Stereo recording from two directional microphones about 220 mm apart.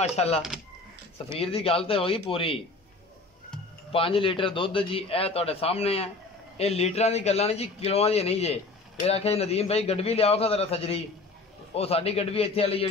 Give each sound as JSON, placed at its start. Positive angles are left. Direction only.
{"t": 0.1, "sound": "a man's voice", "side_deg": 30}
{"t": 1.4, "sound": "a man's voice", "side_deg": 25}
{"t": 3.9, "sound": "a man's voice", "side_deg": 25}